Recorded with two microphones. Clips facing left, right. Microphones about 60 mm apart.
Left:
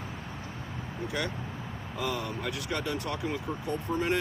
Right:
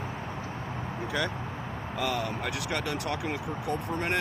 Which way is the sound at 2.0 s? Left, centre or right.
Right.